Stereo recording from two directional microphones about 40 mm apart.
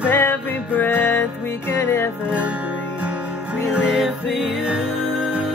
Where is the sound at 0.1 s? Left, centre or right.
Left.